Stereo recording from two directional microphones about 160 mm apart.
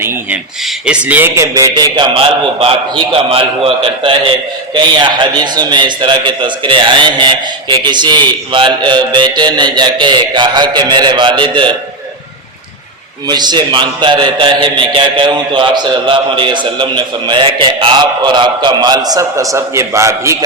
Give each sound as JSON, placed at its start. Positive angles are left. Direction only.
{"t": 0.0, "sound": "a man's voice", "side_deg": -15}
{"t": 13.2, "sound": "a man's voice", "side_deg": -25}